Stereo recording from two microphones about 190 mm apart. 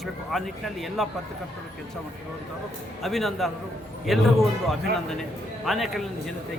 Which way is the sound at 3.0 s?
Centre (ahead or behind).